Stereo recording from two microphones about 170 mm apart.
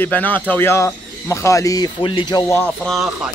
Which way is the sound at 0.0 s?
10° left (ahead or behind).